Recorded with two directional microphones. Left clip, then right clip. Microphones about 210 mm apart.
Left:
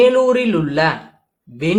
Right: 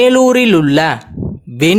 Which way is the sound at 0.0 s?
50° right (ahead or behind).